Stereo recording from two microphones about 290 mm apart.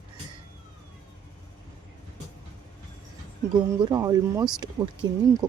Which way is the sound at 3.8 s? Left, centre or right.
Centre.